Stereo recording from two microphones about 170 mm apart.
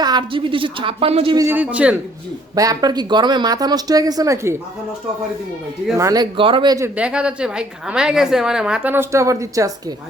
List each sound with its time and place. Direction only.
0.0 s a woman's voice: 25° right (ahead or behind)
1.4 s a man's voice: 10° right (ahead or behind)
2.6 s speech: 20° right (ahead or behind)
6.0 s speech: 20° right (ahead or behind)
6.3 s speech: 30° right (ahead or behind)
6.9 s a woman's voice: 5° right (ahead or behind)